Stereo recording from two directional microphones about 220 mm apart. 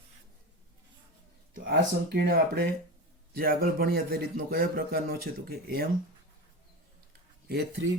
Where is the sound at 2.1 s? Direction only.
45° right (ahead or behind).